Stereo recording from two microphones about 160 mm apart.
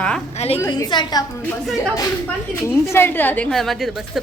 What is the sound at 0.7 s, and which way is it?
Speech, 30° left (ahead or behind).